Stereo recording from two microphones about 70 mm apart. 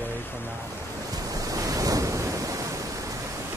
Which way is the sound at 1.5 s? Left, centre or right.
Right.